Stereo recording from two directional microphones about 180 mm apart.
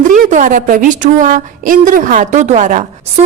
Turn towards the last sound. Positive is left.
turn(degrees=-40)  # may be behind; listen again after turning